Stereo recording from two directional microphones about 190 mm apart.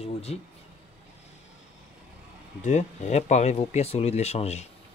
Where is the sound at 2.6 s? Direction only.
40° left (ahead or behind).